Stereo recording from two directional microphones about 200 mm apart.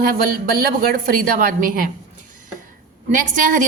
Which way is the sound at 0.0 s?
45° right (ahead or behind).